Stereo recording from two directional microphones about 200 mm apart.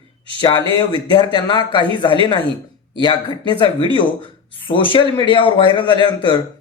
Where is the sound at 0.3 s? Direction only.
25° left (ahead or behind).